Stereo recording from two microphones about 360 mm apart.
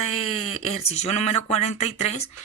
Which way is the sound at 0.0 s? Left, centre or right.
Centre.